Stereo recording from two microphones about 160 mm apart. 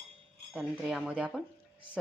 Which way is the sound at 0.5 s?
5° right (ahead or behind).